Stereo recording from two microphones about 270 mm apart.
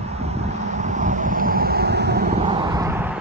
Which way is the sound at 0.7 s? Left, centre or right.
Right.